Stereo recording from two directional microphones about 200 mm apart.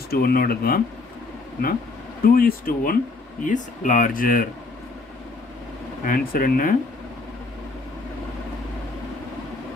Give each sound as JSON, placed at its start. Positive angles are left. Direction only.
{"t": 0.1, "sound": "speech", "side_deg": 50}
{"t": 2.2, "sound": "speech", "side_deg": 45}
{"t": 6.0, "sound": "speech", "side_deg": 45}